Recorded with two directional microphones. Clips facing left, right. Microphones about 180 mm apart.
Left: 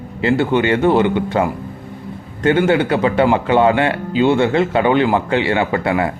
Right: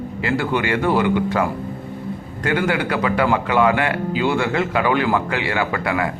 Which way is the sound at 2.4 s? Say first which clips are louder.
Left 6 dB; 25° left (ahead or behind).